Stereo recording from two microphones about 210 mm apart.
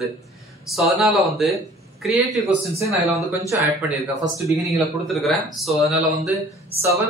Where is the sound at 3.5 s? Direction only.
10° right (ahead or behind).